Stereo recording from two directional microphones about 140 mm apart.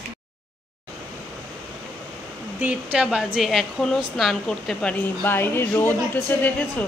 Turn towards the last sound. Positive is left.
turn(degrees=10)  # may be behind; listen again after turning